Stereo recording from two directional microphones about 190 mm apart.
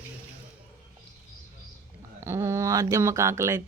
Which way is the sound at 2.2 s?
15° right (ahead or behind).